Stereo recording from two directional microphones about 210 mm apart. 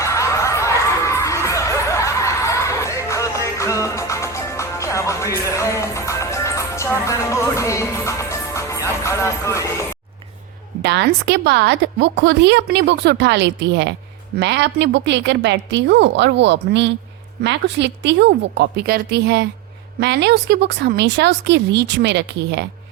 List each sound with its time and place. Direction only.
0.0 s laughter: 15° left (ahead or behind)
5.5 s music: 15° left (ahead or behind)
10.8 s a woman's voice: 55° right (ahead or behind)